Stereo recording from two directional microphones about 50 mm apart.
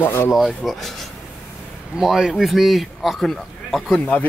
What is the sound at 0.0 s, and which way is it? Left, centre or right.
Speech, left.